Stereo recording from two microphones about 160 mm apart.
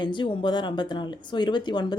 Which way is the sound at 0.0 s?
30° left (ahead or behind).